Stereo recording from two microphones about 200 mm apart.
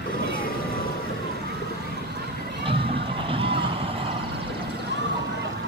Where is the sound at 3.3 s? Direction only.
25° right (ahead or behind).